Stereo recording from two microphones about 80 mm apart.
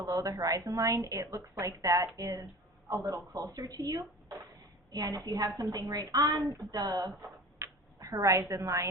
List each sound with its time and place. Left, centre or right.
0.0 s a woman's voice: right
7.9 s a woman's voice: right